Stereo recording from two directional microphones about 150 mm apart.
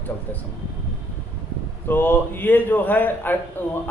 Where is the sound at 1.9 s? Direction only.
15° left (ahead or behind).